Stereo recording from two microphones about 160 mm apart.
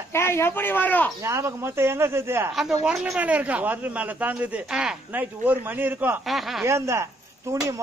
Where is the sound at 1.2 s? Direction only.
15° right (ahead or behind).